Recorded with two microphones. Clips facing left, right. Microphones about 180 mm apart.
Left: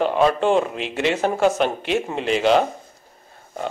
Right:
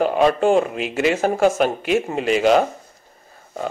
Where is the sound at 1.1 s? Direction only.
45° right (ahead or behind).